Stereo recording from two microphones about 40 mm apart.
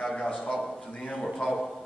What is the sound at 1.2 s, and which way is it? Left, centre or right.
Speech, centre.